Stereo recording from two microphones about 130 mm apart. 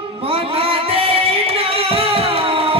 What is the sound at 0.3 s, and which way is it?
Singing, 45° right (ahead or behind).